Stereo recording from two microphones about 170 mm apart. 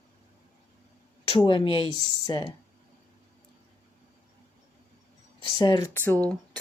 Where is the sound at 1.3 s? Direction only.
30° left (ahead or behind).